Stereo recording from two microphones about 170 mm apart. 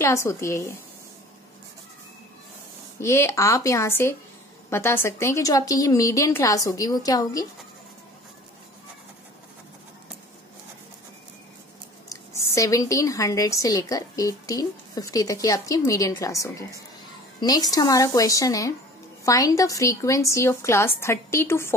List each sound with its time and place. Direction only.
0.0 s a woman's voice: 15° left (ahead or behind)
3.0 s a woman's voice: 15° left (ahead or behind)
12.5 s a woman's voice: 20° left (ahead or behind)